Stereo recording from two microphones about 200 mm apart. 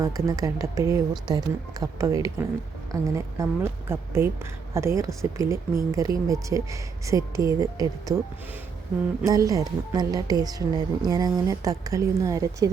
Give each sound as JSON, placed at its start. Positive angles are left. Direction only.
{"t": 0.0, "sound": "speech", "side_deg": -15}
{"t": 9.2, "sound": "speech", "side_deg": -15}